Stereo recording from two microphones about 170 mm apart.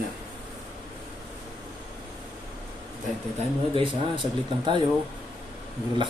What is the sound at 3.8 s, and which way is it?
Speech, 30° right (ahead or behind).